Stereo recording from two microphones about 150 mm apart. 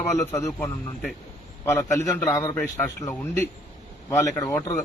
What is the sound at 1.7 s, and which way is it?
A man's voice, 20° left (ahead or behind).